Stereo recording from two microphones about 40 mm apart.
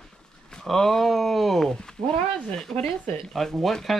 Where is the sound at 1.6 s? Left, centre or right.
Centre.